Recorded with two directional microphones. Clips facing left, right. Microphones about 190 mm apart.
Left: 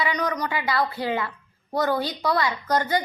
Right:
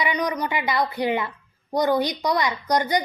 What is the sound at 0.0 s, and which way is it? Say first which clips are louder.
A woman's voice: right 1 dB; 15° right (ahead or behind).